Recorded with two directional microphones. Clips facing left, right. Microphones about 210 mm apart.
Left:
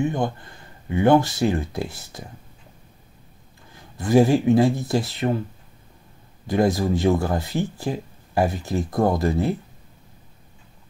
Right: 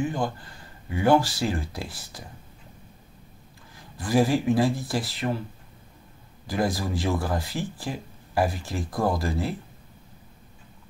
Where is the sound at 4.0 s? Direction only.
25° left (ahead or behind).